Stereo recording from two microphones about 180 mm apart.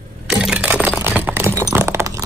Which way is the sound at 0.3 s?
5° right (ahead or behind).